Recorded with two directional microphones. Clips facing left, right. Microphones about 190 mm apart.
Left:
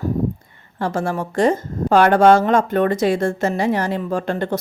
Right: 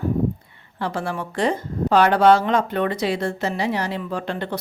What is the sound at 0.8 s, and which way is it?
Speech, 45° left (ahead or behind).